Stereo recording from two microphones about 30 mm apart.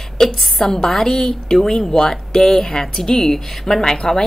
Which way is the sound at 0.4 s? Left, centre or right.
Centre.